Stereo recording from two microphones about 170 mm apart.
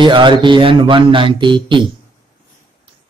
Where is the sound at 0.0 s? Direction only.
30° right (ahead or behind).